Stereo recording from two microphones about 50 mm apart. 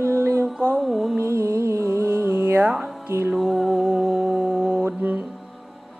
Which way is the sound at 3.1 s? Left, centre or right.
Right.